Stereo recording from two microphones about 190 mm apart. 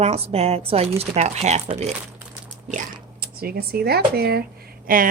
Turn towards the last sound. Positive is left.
turn(degrees=-45)  # may be behind; listen again after turning